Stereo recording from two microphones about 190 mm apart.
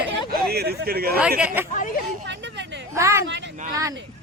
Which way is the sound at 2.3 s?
70° right (ahead or behind).